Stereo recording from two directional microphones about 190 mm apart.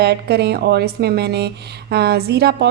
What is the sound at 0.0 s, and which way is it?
A woman's voice, 60° right (ahead or behind).